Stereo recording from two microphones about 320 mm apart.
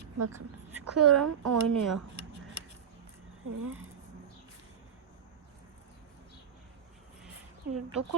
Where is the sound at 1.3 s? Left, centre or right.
Right.